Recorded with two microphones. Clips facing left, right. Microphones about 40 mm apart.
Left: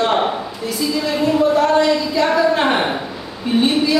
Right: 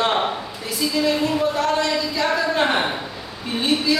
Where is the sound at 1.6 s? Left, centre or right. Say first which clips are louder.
Left 6 dB; centre.